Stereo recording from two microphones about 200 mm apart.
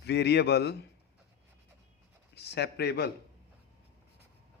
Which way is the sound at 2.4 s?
55° left (ahead or behind).